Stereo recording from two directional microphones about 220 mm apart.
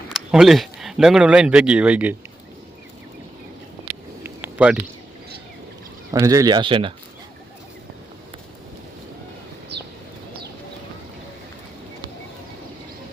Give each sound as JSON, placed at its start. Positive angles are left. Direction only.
{"t": 0.1, "sound": "speech", "side_deg": 0}
{"t": 4.2, "sound": "a sound", "side_deg": -10}
{"t": 6.1, "sound": "speech", "side_deg": -15}